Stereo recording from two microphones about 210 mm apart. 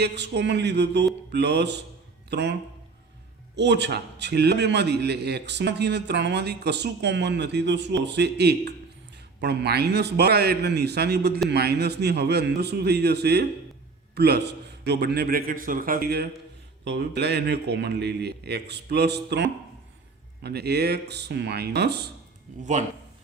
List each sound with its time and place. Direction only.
0.0 s a man's voice: 55° right (ahead or behind)